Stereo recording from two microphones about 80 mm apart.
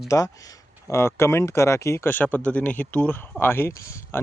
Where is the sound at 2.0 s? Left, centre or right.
Left.